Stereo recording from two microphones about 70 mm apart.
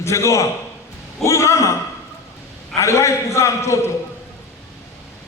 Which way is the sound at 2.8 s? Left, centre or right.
Left.